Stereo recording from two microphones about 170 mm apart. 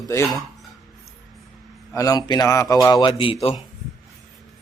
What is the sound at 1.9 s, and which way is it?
A man's voice, 20° left (ahead or behind).